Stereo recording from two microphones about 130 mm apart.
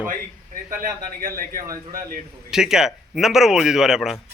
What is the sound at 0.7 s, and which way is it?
Speech, 90° right.